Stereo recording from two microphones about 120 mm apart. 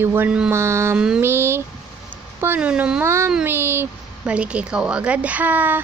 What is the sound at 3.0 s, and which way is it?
Speech, 20° right (ahead or behind).